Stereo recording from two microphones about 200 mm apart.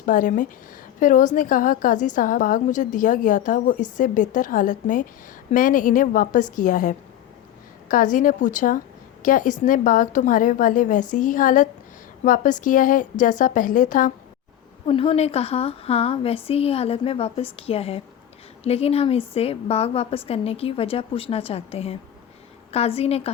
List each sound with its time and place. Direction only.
0.0 s a woman's voice: 40° left (ahead or behind)
14.8 s a woman's voice: 30° left (ahead or behind)